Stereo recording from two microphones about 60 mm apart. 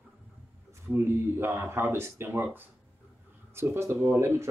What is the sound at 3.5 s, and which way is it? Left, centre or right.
Speech, right.